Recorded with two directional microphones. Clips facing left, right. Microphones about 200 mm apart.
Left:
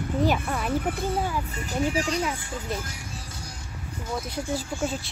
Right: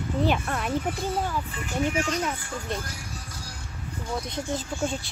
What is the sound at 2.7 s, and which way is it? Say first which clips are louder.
Speech: even; centre (ahead or behind).